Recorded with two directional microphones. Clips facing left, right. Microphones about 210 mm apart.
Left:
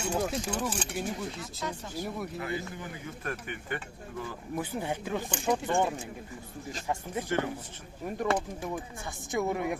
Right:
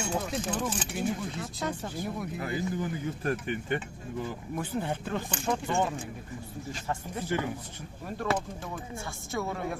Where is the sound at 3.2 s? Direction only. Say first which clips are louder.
Right 5 dB; 35° right (ahead or behind).